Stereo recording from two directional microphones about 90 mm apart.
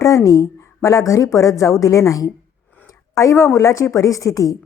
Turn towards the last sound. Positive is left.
turn(degrees=40)  # may be behind; listen again after turning